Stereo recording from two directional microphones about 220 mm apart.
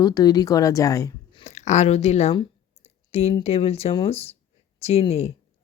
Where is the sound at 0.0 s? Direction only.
15° left (ahead or behind).